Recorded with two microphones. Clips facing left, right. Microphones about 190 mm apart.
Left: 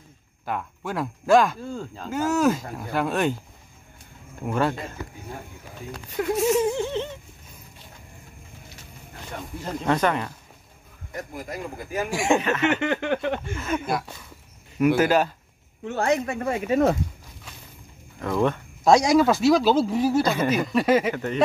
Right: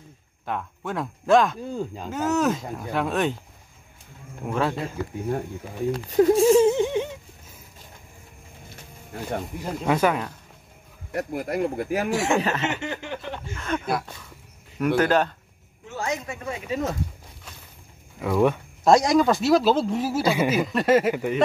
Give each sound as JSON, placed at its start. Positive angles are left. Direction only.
{"t": 0.5, "sound": "speech", "side_deg": 5}
{"t": 4.5, "sound": "speech", "side_deg": 0}
{"t": 5.9, "sound": "speech", "side_deg": -35}
{"t": 9.7, "sound": "speech", "side_deg": -5}
{"t": 11.1, "sound": "speech", "side_deg": -65}
{"t": 12.1, "sound": "a man's voice", "side_deg": 10}
{"t": 12.4, "sound": "speech", "side_deg": -35}
{"t": 12.8, "sound": "speech", "side_deg": 65}
{"t": 13.6, "sound": "a man's voice", "side_deg": 5}
{"t": 15.8, "sound": "speech", "side_deg": 60}
{"t": 18.2, "sound": "speech", "side_deg": -10}